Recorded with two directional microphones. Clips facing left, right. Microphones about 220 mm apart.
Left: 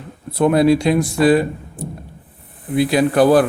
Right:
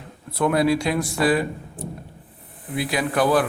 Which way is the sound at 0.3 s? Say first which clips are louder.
Left 6 dB; 25° left (ahead or behind).